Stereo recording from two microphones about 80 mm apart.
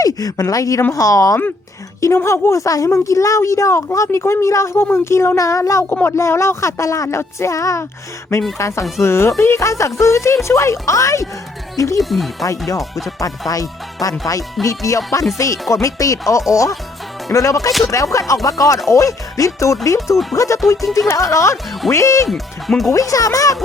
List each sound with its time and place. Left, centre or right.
0.0 s a woman's voice: left
5.9 s speech: left
6.1 s a woman's voice: left
11.9 s speech: centre
13.5 s a woman's voice: left
17.7 s speech: centre
17.9 s a woman's voice: left
22.3 s speech: centre
22.9 s speech: left